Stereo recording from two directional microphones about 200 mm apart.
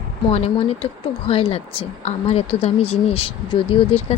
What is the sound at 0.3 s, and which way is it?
A woman's voice, 30° left (ahead or behind).